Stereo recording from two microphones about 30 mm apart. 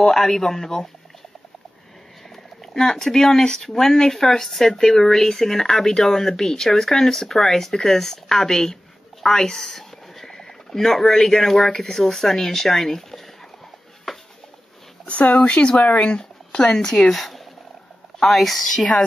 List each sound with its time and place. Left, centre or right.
0.0 s speech: centre
2.6 s speech: centre
14.1 s a sound: centre
15.3 s speech: left
15.8 s speech: left
16.8 s speech: centre
17.1 s speech: centre